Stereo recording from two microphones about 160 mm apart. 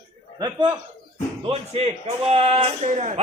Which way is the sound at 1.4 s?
40° right (ahead or behind).